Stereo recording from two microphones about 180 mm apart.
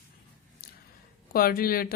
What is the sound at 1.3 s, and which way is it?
Speech, 55° left (ahead or behind).